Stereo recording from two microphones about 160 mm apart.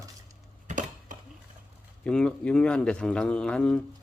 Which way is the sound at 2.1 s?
5° left (ahead or behind).